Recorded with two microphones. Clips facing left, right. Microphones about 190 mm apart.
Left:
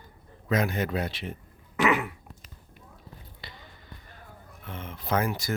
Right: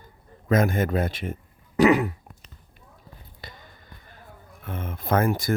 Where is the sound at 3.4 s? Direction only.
45° right (ahead or behind).